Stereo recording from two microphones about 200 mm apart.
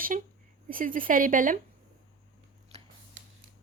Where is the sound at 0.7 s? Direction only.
45° right (ahead or behind).